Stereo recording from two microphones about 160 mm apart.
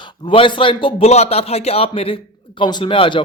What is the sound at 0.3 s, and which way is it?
A man's voice, 30° left (ahead or behind).